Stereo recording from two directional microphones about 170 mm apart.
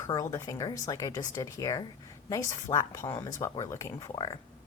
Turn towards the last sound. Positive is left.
turn(degrees=25)  # may be behind; listen again after turning